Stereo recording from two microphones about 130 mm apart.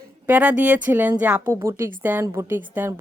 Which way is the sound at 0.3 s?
15° right (ahead or behind).